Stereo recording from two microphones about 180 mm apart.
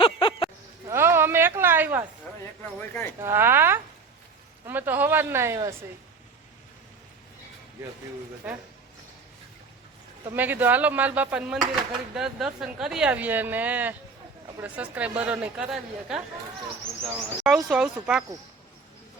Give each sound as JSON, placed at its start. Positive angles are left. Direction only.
{"t": 0.0, "sound": "a sound", "side_deg": 30}
{"t": 0.9, "sound": "a sound", "side_deg": -15}
{"t": 2.9, "sound": "speech", "side_deg": 10}
{"t": 3.2, "sound": "speech", "side_deg": -15}
{"t": 8.4, "sound": "speech", "side_deg": -10}
{"t": 10.3, "sound": "speech", "side_deg": -10}
{"t": 17.4, "sound": "speech", "side_deg": -5}